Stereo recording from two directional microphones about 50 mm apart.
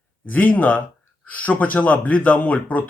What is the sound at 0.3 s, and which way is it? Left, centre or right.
Speech, left.